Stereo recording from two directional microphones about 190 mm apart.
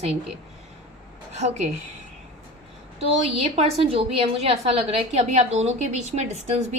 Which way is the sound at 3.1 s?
30° right (ahead or behind).